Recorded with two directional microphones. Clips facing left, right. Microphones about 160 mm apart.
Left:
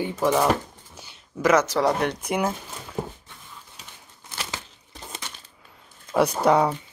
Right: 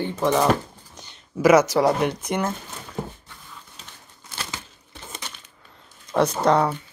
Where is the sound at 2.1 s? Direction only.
10° left (ahead or behind).